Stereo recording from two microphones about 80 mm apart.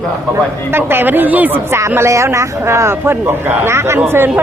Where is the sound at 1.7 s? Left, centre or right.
Right.